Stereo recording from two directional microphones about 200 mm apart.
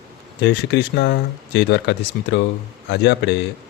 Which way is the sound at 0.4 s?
60° left (ahead or behind).